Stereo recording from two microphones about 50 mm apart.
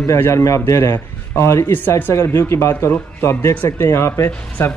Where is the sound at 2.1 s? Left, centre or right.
Left.